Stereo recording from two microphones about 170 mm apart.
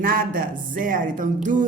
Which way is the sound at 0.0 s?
55° right (ahead or behind).